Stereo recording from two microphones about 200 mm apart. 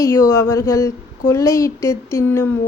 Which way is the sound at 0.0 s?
15° left (ahead or behind).